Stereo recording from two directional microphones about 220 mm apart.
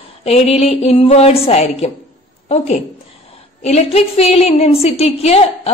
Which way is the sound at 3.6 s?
30° left (ahead or behind).